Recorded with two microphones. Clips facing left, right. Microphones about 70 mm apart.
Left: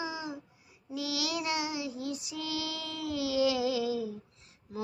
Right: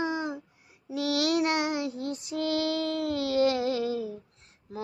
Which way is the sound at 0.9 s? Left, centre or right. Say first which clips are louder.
Right 8 dB; right.